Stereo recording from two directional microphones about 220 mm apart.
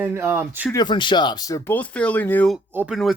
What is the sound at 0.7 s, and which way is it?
Speech, 20° left (ahead or behind).